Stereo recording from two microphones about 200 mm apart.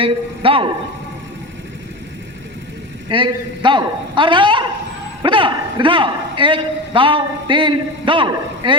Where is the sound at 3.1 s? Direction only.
25° right (ahead or behind).